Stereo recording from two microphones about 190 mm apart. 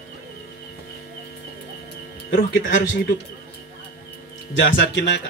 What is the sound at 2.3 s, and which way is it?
Speech, 55° left (ahead or behind).